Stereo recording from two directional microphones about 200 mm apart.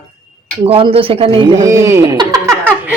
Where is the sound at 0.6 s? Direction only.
30° right (ahead or behind).